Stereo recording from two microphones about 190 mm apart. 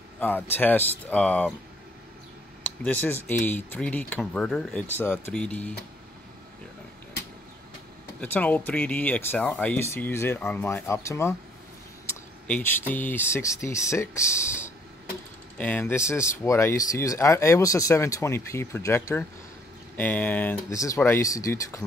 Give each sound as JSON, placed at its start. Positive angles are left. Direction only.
{"t": 0.2, "sound": "speech", "side_deg": 10}
{"t": 2.6, "sound": "speech", "side_deg": 10}
{"t": 8.2, "sound": "speech", "side_deg": 10}